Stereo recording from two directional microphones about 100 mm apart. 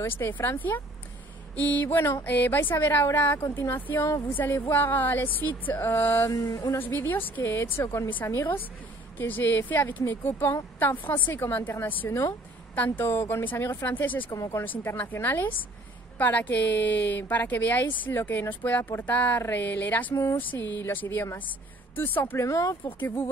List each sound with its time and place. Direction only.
0.0 s speech: 20° left (ahead or behind)
6.3 s speech: 35° left (ahead or behind)
6.8 s speech: 20° left (ahead or behind)
14.3 s speech: 35° left (ahead or behind)
14.6 s speech: 20° left (ahead or behind)
22.8 s speech: 20° left (ahead or behind)